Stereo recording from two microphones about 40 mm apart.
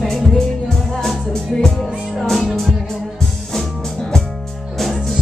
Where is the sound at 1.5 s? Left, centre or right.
Centre.